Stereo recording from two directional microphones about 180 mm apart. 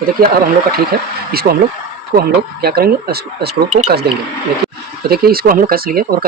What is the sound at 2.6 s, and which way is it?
Speech, 60° right (ahead or behind).